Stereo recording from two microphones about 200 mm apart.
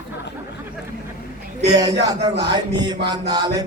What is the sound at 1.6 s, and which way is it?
Mantra, 20° right (ahead or behind).